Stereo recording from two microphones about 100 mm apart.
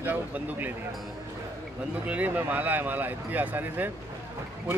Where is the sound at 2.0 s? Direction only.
15° right (ahead or behind).